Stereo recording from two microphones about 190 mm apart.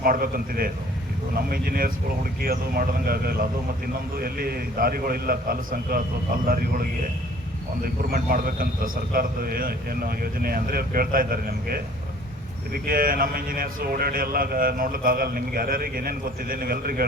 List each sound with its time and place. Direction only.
0.0 s speech: 50° right (ahead or behind)
8.1 s speech: 50° right (ahead or behind)